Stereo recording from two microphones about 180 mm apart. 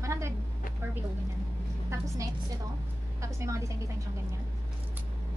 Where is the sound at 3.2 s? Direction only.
15° right (ahead or behind).